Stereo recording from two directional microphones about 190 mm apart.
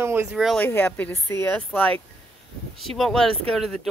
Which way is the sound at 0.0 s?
10° right (ahead or behind).